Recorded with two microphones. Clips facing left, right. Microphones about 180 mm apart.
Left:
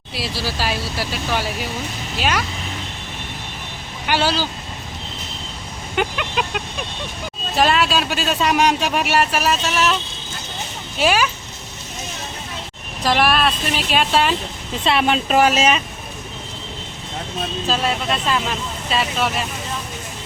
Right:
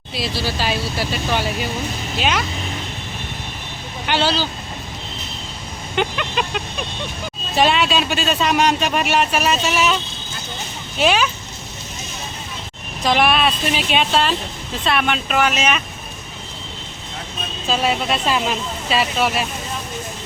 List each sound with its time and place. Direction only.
0.1 s speech: 5° left (ahead or behind)
4.0 s speech: 10° left (ahead or behind)
6.0 s vehicle: 5° left (ahead or behind)
7.5 s speech: centre (ahead or behind)
11.0 s speech: 5° left (ahead or behind)
13.1 s speech: centre (ahead or behind)
14.8 s speech: 30° left (ahead or behind)
17.7 s speech: centre (ahead or behind)
18.1 s speech: 15° right (ahead or behind)